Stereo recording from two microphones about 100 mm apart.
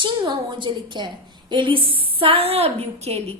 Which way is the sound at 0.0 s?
50° right (ahead or behind).